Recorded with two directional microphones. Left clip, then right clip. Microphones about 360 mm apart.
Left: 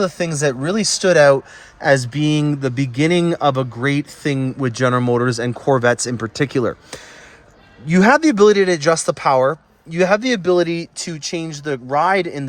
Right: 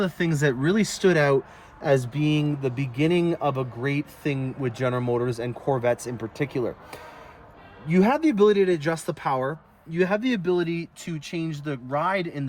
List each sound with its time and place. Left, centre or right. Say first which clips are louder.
0.0 s speech: left 6 dB; centre